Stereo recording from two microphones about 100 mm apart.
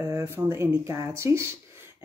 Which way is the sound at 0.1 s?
25° right (ahead or behind).